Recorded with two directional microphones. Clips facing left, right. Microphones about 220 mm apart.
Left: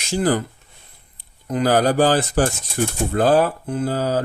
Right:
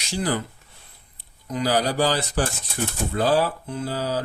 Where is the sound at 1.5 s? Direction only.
55° left (ahead or behind).